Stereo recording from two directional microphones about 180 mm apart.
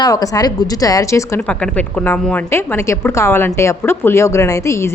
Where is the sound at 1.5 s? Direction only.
5° left (ahead or behind).